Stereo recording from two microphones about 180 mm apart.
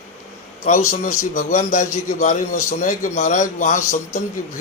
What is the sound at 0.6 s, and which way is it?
A man's voice, 45° left (ahead or behind).